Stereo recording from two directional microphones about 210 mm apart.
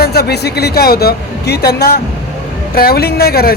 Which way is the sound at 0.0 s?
50° left (ahead or behind).